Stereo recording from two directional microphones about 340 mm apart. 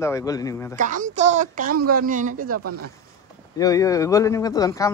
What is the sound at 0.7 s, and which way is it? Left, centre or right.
Speech, right.